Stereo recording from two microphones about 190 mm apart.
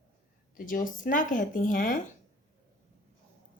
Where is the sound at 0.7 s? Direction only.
45° left (ahead or behind).